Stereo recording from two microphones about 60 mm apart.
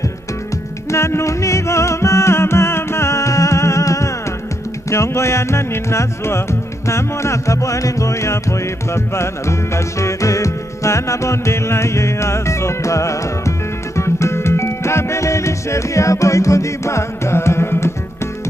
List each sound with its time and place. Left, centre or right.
0.8 s music: left